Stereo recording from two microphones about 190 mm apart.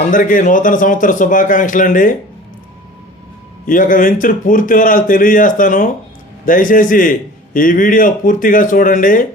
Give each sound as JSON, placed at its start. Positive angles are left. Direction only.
{"t": 0.1, "sound": "a man's voice", "side_deg": 45}
{"t": 3.7, "sound": "a man's voice", "side_deg": 45}